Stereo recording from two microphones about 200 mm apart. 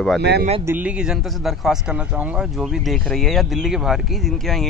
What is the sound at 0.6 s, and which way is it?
A man's voice, 10° right (ahead or behind).